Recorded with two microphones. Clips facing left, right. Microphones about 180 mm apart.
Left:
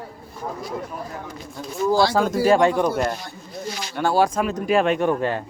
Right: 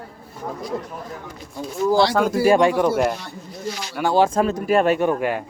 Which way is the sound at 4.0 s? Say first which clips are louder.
Right 1 dB; 20° right (ahead or behind).